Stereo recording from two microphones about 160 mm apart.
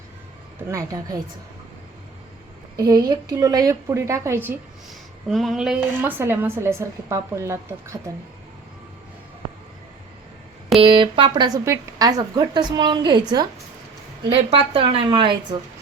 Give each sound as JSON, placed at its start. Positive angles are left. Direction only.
{"t": 0.7, "sound": "speech", "side_deg": -20}
{"t": 2.7, "sound": "speech", "side_deg": -25}
{"t": 5.3, "sound": "a woman's voice", "side_deg": 0}
{"t": 10.8, "sound": "a woman's voice", "side_deg": -30}